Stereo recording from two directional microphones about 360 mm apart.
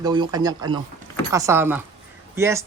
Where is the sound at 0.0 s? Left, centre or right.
Centre.